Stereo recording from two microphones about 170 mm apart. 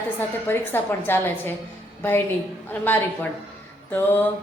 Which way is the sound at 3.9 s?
10° left (ahead or behind).